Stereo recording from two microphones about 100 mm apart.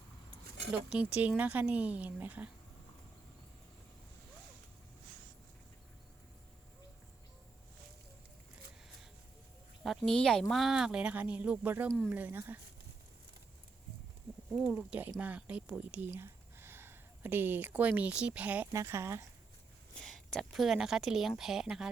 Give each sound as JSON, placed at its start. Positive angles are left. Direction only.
{"t": 0.7, "sound": "speech", "side_deg": -10}
{"t": 9.8, "sound": "a sound", "side_deg": 0}
{"t": 10.2, "sound": "speech", "side_deg": 5}
{"t": 14.8, "sound": "speech", "side_deg": -15}
{"t": 18.7, "sound": "speech", "side_deg": -30}
{"t": 20.0, "sound": "speech", "side_deg": 5}